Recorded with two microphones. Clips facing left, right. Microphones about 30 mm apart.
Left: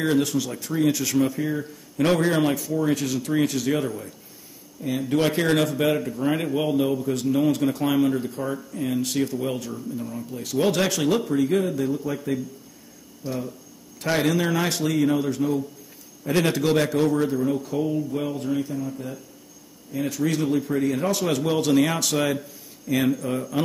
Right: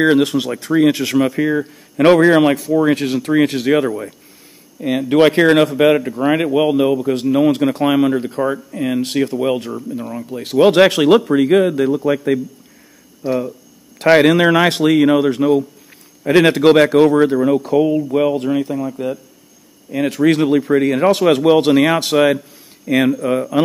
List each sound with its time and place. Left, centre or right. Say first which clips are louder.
0.0 s a man's voice: right 9 dB; right
13.2 s speech: right 11 dB; right
13.9 s a man's voice: right 12 dB; right